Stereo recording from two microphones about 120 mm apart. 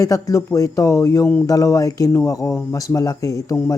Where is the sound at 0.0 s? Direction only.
30° left (ahead or behind).